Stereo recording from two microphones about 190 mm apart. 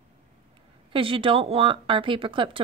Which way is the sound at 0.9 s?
25° right (ahead or behind).